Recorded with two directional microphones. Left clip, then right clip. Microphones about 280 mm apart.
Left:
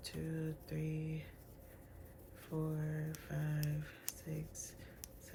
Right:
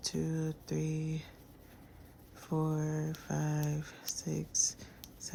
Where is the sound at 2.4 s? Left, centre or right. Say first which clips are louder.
Right 8 dB; centre.